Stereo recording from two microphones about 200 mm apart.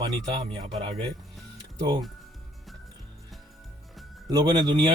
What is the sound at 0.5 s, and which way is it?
Speech, 25° right (ahead or behind).